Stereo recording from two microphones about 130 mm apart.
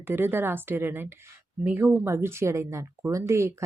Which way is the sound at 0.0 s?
15° right (ahead or behind).